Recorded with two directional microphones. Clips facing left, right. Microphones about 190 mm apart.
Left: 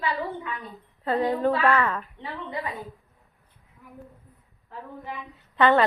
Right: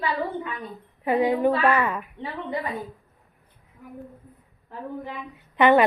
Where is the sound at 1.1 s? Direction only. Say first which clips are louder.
Right 3 dB; 15° right (ahead or behind).